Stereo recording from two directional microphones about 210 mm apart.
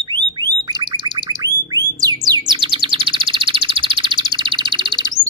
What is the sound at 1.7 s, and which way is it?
Music, 15° right (ahead or behind).